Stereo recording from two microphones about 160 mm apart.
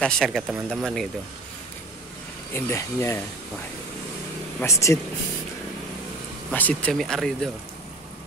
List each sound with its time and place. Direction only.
0.0 s speech: centre (ahead or behind)
2.5 s speech: 15° left (ahead or behind)
4.6 s speech: 20° left (ahead or behind)
6.5 s speech: 10° left (ahead or behind)